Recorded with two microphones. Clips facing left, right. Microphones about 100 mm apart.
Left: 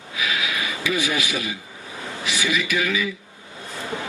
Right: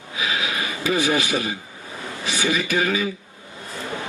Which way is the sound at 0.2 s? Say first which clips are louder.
Right 1 dB; 30° right (ahead or behind).